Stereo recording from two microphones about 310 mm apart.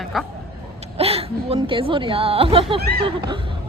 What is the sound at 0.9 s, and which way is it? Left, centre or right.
A woman's voice, centre.